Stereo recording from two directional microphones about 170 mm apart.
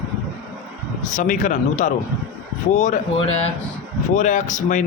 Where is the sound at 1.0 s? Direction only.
50° left (ahead or behind).